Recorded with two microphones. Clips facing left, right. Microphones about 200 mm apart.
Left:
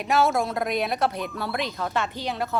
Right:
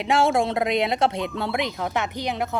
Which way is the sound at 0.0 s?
25° right (ahead or behind).